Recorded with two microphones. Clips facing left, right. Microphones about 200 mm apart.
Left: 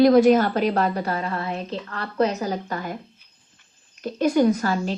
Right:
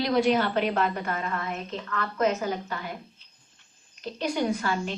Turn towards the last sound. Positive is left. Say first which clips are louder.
# left 7 dB
turn(degrees=40)  # may be behind; listen again after turning